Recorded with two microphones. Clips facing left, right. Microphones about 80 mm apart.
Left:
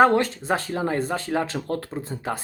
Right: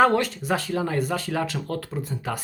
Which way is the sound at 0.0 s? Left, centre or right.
Left.